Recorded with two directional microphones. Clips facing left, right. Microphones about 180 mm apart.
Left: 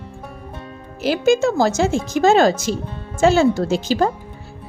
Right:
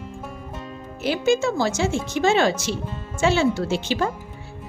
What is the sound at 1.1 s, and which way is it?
A woman's voice, 40° left (ahead or behind).